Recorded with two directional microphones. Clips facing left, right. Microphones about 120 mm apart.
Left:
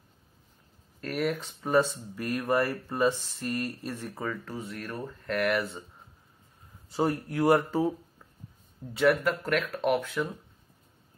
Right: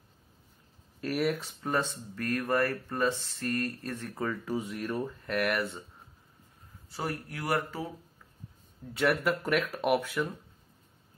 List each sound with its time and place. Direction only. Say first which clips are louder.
1.0 s speech: even; centre (ahead or behind)
4.5 s speech: right 4 dB; 15° right (ahead or behind)
6.9 s speech: left 8 dB; 25° left (ahead or behind)
8.9 s speech: left 3 dB; 5° right (ahead or behind)